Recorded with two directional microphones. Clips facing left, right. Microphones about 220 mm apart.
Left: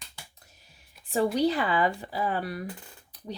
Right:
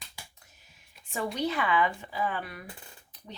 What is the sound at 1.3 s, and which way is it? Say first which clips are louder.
Speech: left 4 dB; 35° left (ahead or behind).